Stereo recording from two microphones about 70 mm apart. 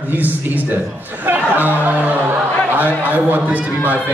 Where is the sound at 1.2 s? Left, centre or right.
Right.